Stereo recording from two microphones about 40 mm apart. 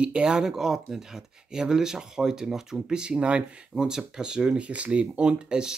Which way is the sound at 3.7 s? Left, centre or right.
Centre.